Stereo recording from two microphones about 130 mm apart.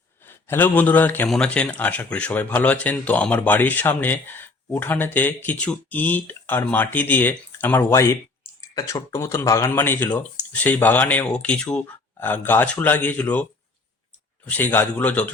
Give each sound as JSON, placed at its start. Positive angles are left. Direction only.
{"t": 0.3, "sound": "a man's voice", "side_deg": 15}
{"t": 14.5, "sound": "speech", "side_deg": 15}